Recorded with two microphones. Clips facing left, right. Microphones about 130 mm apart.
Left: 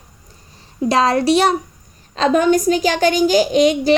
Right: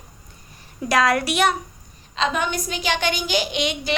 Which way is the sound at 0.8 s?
30° left (ahead or behind).